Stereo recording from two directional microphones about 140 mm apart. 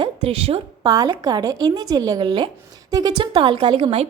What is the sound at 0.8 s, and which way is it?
A woman's voice, 30° right (ahead or behind).